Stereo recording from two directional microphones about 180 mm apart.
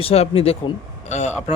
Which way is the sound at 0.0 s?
35° left (ahead or behind).